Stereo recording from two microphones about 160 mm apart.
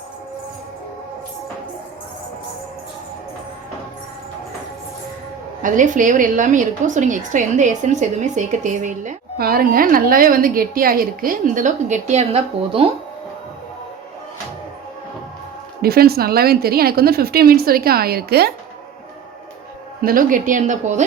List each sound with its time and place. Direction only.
5.6 s a woman's voice: 55° right (ahead or behind); by 12.9 s 40° right (ahead or behind)
15.8 s a woman's voice: 70° right (ahead or behind)
20.0 s speech: 60° right (ahead or behind)